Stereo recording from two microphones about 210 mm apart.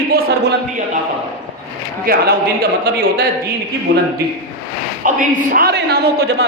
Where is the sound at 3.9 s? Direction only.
55° right (ahead or behind).